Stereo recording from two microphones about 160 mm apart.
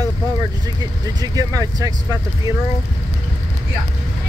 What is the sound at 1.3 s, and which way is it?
Speech, 20° right (ahead or behind).